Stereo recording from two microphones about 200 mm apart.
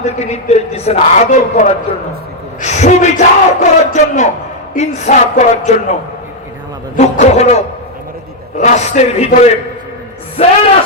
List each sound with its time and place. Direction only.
0.0 s a man's voice: 35° left (ahead or behind)
6.9 s a man's voice: 35° left (ahead or behind)